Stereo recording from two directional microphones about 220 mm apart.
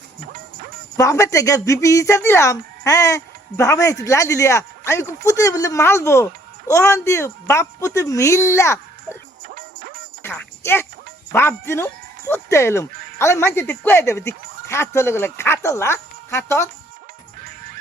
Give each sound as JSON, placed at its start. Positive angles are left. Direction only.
{"t": 0.9, "sound": "speech", "side_deg": 15}
{"t": 9.5, "sound": "music", "side_deg": -40}
{"t": 10.2, "sound": "music", "side_deg": 10}
{"t": 11.3, "sound": "speech", "side_deg": 10}